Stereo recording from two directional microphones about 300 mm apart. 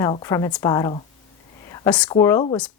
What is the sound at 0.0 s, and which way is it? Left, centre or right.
A woman's voice, centre.